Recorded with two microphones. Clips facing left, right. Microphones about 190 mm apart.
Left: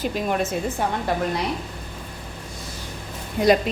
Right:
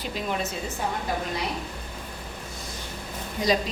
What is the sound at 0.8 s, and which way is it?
Speech, 65° left (ahead or behind).